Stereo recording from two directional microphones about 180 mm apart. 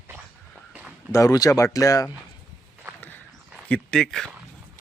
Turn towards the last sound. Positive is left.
turn(degrees=5)  # may be behind; listen again after turning